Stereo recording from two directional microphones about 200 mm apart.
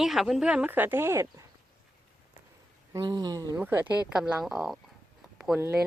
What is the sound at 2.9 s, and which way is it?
Speech, 20° right (ahead or behind).